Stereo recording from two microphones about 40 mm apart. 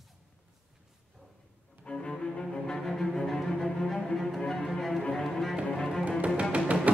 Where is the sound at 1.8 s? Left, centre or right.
Left.